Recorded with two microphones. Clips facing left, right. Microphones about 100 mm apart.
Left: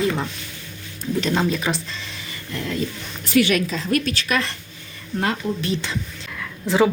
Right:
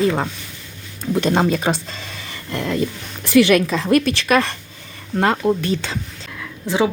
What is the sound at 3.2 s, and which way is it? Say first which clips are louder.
Speech: right 5 dB; 85° right.